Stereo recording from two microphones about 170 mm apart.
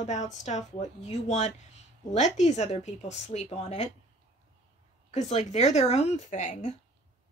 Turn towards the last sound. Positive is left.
turn(degrees=45)  # may be behind; listen again after turning